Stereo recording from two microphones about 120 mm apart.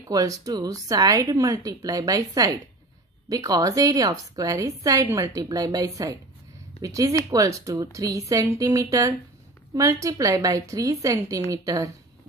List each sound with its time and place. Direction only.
0.0 s a woman's voice: 30° right (ahead or behind)